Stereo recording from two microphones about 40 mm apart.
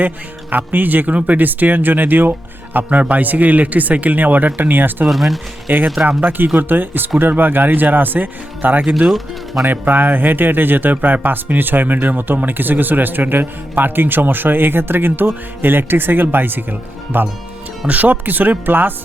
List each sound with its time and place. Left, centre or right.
0.5 s speech: right
3.0 s speech: right
5.0 s speech: centre
5.7 s speech: right
9.0 s speech: centre
9.6 s speech: right
17.8 s speech: right